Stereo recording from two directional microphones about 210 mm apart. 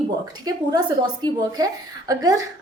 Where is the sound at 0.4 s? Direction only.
20° right (ahead or behind).